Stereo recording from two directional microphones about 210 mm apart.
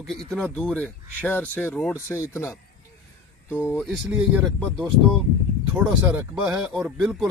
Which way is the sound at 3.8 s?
Centre (ahead or behind).